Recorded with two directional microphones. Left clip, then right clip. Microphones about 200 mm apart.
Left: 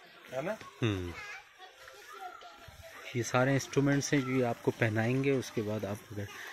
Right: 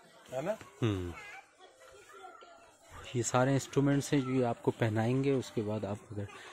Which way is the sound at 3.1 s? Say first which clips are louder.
Even; 15° right (ahead or behind).